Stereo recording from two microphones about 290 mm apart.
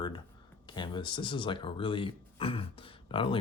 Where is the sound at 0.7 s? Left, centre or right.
Centre.